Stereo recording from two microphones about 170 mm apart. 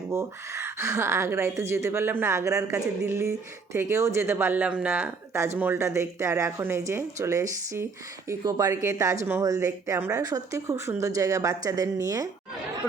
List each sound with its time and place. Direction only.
0.1 s a woman's voice: 15° right (ahead or behind)